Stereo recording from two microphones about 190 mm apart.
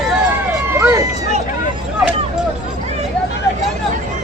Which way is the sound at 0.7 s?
15° right (ahead or behind).